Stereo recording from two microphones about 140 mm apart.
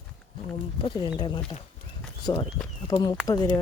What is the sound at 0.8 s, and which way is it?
Speech, 30° left (ahead or behind).